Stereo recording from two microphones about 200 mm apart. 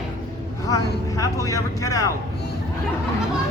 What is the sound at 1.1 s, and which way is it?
Vehicle, 15° left (ahead or behind).